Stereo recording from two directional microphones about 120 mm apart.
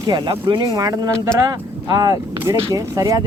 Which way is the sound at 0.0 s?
40° right (ahead or behind).